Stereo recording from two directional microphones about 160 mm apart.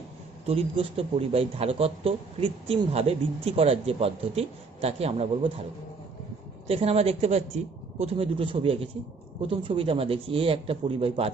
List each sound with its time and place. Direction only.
0.4 s speech: 35° right (ahead or behind)
6.7 s speech: 40° right (ahead or behind)